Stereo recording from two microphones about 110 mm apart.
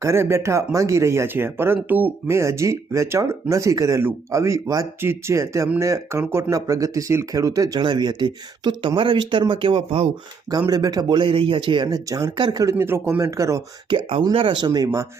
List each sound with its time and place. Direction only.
0.0 s speech: 25° right (ahead or behind); by 10.1 s 55° right (ahead or behind)
10.7 s speech: 35° right (ahead or behind)
11.2 s speech: 50° right (ahead or behind)
11.9 s speech: 35° right (ahead or behind)
12.6 s speech: 20° right (ahead or behind)
13.9 s speech: 50° right (ahead or behind)